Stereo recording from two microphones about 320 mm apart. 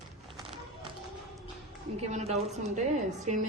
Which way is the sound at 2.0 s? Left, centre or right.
Right.